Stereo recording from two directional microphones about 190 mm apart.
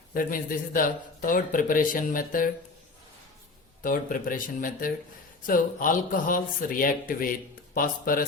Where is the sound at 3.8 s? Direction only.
45° left (ahead or behind).